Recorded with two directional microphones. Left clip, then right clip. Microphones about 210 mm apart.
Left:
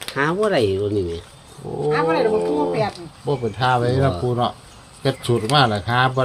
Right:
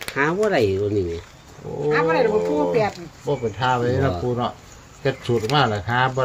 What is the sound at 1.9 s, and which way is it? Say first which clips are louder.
Speech: even; 25° right (ahead or behind).